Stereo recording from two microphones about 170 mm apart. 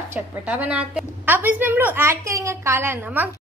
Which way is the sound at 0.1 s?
10° right (ahead or behind).